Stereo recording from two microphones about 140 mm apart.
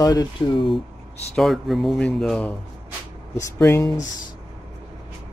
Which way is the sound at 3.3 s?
20° left (ahead or behind).